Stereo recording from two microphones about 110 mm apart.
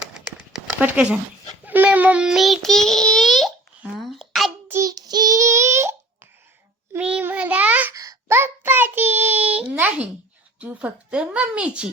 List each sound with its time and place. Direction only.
0.0 s a sound: 5° right (ahead or behind)
1.6 s a child's voice: 15° right (ahead or behind); by 3.5 s centre (ahead or behind)
3.9 s a sound: centre (ahead or behind)
4.7 s child singing: 30° right (ahead or behind)
6.9 s child singing: 15° right (ahead or behind)
7.9 s child singing: 25° right (ahead or behind)
10.6 s a woman's voice: 15° right (ahead or behind)